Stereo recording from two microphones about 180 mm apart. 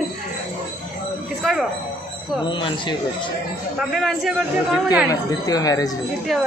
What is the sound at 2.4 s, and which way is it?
Speech, 25° left (ahead or behind).